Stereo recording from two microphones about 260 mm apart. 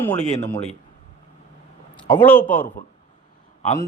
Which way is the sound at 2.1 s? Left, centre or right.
Centre.